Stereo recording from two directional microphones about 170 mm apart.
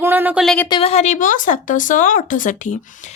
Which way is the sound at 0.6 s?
30° left (ahead or behind).